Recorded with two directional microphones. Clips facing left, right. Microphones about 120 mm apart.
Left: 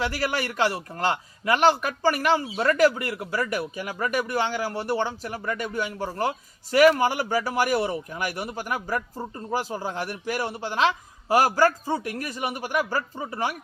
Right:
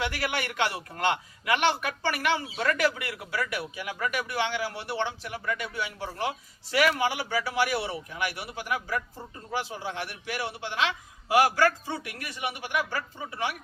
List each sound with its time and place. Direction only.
0.0 s a man's voice: 35° left (ahead or behind)